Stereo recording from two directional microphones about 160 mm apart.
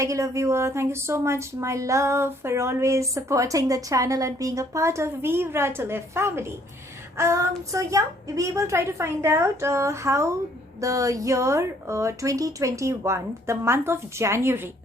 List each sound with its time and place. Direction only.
0.0 s a woman's voice: 20° right (ahead or behind)